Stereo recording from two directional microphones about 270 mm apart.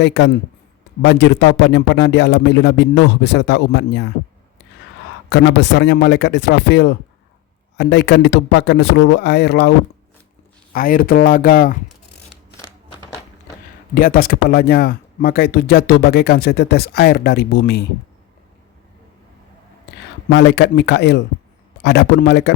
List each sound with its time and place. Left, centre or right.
0.0 s speech: left
5.3 s speech: left
12.5 s a sound: centre
13.9 s speech: left
20.3 s speech: left